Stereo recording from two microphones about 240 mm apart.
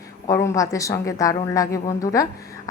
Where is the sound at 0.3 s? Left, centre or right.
Centre.